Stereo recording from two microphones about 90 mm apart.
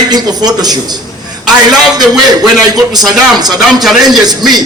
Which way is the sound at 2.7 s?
45° right (ahead or behind).